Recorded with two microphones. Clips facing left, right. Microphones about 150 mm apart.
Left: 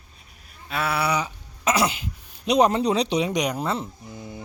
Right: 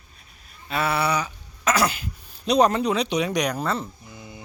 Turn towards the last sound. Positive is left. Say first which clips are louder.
# left 4 dB
turn(degrees=-5)  # may be behind; listen again after turning